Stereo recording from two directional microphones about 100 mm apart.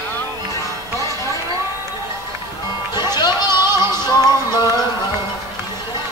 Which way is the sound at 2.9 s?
45° left (ahead or behind).